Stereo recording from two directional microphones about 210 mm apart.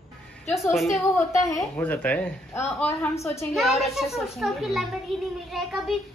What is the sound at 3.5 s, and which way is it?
A child's voice, centre (ahead or behind).